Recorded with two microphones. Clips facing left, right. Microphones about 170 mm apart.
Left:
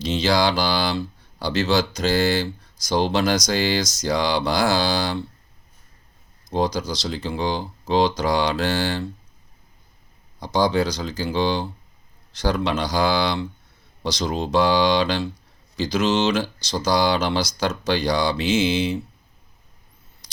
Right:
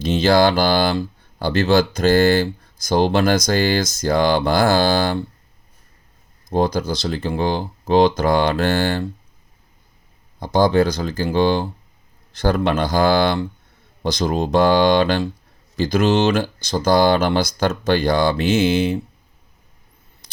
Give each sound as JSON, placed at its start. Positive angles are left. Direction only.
{"t": 0.0, "sound": "speech", "side_deg": -55}
{"t": 6.5, "sound": "speech", "side_deg": -50}
{"t": 10.4, "sound": "speech", "side_deg": -55}